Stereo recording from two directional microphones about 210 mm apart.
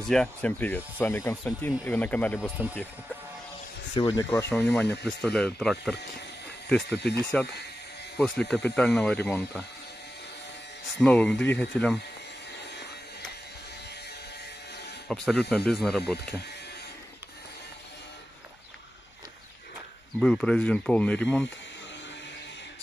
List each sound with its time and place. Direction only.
0.1 s speech: 5° left (ahead or behind)
3.9 s speech: 20° left (ahead or behind)
4.3 s speech: 10° left (ahead or behind)
7.3 s speech: 5° left (ahead or behind)
11.0 s speech: 5° left (ahead or behind)
15.0 s speech: centre (ahead or behind)
20.2 s speech: 5° left (ahead or behind)